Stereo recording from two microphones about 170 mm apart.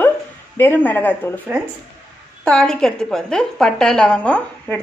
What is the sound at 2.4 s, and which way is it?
A woman's voice, 5° left (ahead or behind).